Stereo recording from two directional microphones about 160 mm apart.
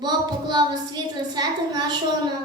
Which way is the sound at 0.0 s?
25° right (ahead or behind).